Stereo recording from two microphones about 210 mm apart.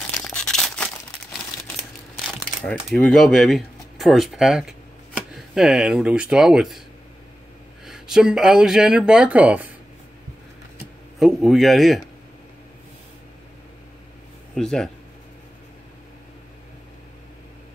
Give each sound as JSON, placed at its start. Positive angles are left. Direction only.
{"t": 0.2, "sound": "a sound", "side_deg": 5}
{"t": 2.6, "sound": "speech", "side_deg": 5}
{"t": 7.8, "sound": "speech", "side_deg": 0}
{"t": 11.1, "sound": "speech", "side_deg": 0}
{"t": 14.5, "sound": "speech", "side_deg": 0}